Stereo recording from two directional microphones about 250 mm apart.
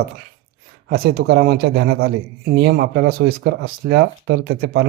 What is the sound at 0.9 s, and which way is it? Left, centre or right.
Speech, right.